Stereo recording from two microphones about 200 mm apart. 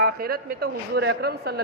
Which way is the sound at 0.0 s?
50° right (ahead or behind).